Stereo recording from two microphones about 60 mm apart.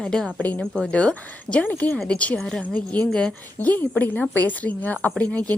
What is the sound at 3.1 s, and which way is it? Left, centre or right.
Speech, centre.